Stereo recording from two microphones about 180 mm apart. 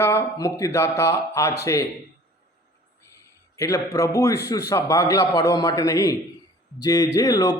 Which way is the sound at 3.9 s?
20° left (ahead or behind).